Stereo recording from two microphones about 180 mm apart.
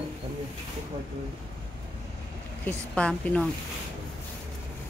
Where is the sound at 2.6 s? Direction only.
5° left (ahead or behind).